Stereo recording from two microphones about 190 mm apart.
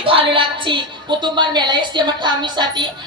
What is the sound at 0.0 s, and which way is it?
A woman's voice, 25° right (ahead or behind).